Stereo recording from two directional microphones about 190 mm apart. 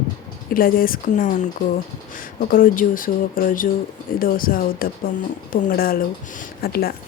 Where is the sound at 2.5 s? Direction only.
45° left (ahead or behind).